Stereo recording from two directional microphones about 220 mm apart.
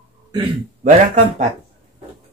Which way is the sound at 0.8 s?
35° right (ahead or behind).